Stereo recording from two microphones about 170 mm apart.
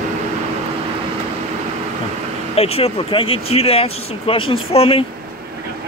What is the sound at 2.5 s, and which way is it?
Speech, 35° left (ahead or behind).